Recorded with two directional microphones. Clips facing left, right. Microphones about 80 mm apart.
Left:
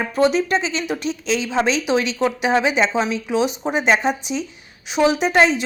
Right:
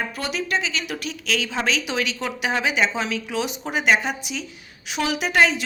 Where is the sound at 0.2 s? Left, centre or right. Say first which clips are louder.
Left 11 dB; left.